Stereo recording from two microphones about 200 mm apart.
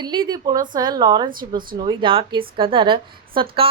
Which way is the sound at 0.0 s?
20° right (ahead or behind).